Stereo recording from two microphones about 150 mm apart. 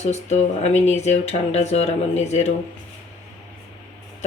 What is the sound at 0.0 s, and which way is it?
Speech, 45° left (ahead or behind).